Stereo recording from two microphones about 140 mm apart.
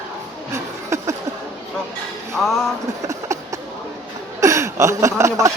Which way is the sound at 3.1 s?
20° right (ahead or behind).